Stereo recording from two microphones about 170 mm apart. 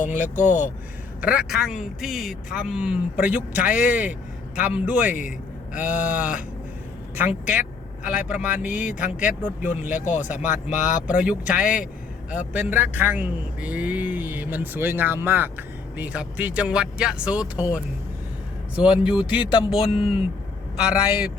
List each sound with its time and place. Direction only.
0.2 s a man's voice: 10° right (ahead or behind)
18.8 s speech: 5° right (ahead or behind)
20.0 s speech: 35° left (ahead or behind)
20.7 s speech: 5° right (ahead or behind)